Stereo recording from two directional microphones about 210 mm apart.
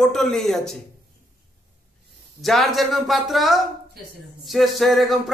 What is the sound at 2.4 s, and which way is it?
Speech, centre (ahead or behind).